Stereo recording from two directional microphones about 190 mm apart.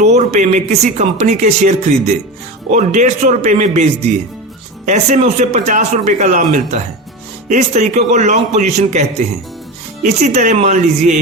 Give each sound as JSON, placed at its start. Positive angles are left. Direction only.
{"t": 0.0, "sound": "a man's voice", "side_deg": -35}
{"t": 4.9, "sound": "a man's voice", "side_deg": -40}